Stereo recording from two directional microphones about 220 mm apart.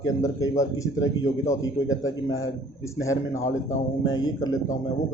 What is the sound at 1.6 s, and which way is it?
Speech, 65° left (ahead or behind).